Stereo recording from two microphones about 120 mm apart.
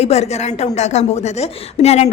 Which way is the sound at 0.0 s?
60° left (ahead or behind).